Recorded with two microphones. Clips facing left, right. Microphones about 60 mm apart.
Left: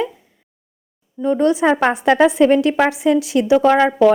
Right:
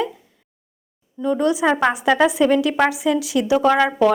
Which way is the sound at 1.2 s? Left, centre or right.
Left.